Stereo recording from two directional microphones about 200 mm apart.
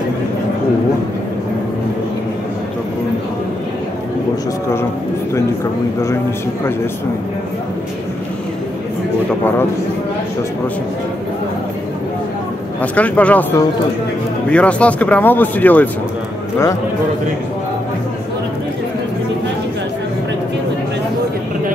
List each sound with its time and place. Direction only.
12.9 s speech: 5° left (ahead or behind)